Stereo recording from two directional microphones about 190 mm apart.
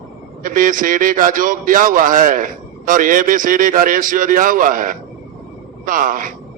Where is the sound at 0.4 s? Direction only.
45° right (ahead or behind).